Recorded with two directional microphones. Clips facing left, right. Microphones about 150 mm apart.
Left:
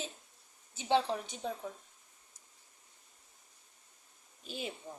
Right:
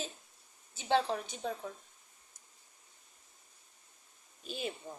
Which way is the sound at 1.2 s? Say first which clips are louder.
Right 1 dB; 20° left (ahead or behind).